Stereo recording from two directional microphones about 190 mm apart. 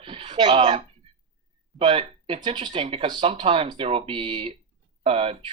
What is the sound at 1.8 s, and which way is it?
Speech, 30° right (ahead or behind).